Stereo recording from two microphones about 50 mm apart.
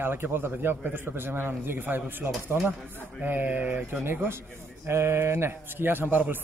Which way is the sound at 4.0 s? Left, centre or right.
Right.